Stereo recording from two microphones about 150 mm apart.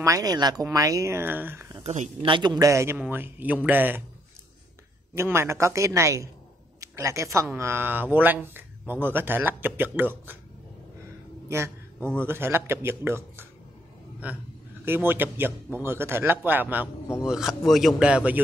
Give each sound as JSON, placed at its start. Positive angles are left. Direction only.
{"t": 0.0, "sound": "speech", "side_deg": -25}
{"t": 1.8, "sound": "speech", "side_deg": -45}
{"t": 2.3, "sound": "a man's voice", "side_deg": -30}
{"t": 5.1, "sound": "a man's voice", "side_deg": -20}
{"t": 11.4, "sound": "a sound", "side_deg": -20}
{"t": 12.3, "sound": "a man's voice", "side_deg": -15}